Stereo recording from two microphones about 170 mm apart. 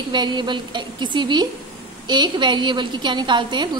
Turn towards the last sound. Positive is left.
turn(degrees=-25)  # may be behind; listen again after turning